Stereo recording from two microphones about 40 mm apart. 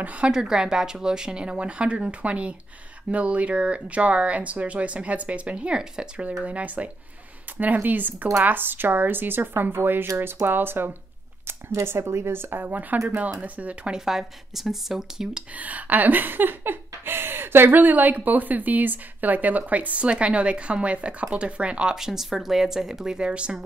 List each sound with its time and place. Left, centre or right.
0.0 s speech: right
0.3 s speech: centre; by 5.7 s right
5.7 s speech: right
6.4 s speech: right
7.5 s a sound: right
8.5 s speech: right
11.4 s speech: right
12.6 s speech: right
13.9 s speech: centre
15.5 s a sound: right
21.9 s speech: centre; by 23.6 s right